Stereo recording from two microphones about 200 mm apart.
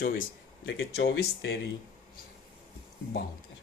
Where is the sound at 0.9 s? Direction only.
55° left (ahead or behind).